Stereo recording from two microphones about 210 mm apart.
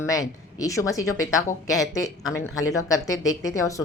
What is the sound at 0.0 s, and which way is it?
Speech, 15° left (ahead or behind).